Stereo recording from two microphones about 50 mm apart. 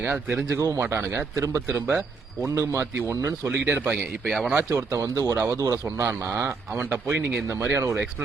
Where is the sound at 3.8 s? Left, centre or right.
Right.